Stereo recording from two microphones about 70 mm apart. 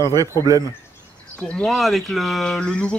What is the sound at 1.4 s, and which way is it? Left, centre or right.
Speech, centre.